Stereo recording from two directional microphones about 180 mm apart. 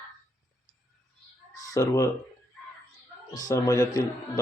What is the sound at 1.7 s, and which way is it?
Speech, 15° left (ahead or behind).